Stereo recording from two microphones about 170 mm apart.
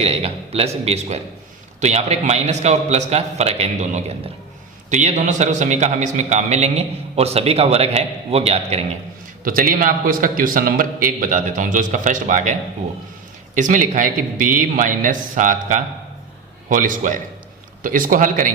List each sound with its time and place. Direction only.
0.0 s a man's voice: 35° right (ahead or behind)
9.4 s a man's voice: 55° right (ahead or behind)
13.6 s a man's voice: 50° right (ahead or behind)